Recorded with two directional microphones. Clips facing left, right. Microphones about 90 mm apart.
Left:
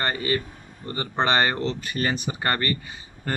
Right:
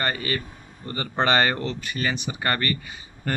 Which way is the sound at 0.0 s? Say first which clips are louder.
Left 2 dB; 20° left (ahead or behind).